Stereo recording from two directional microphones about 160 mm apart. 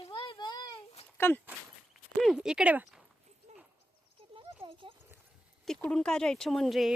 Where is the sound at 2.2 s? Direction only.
5° right (ahead or behind).